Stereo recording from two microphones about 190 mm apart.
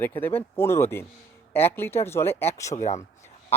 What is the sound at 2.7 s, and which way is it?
Speech, 35° left (ahead or behind).